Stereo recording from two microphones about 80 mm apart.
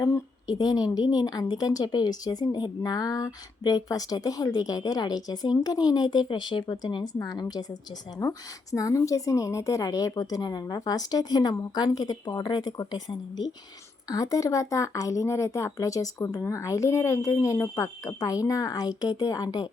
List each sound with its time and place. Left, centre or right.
0.5 s a woman's voice: left
3.8 s a woman's voice: left
8.2 s a woman's voice: left
14.1 s a woman's voice: left